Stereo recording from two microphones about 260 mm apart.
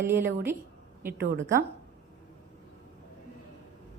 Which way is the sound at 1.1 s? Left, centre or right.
Right.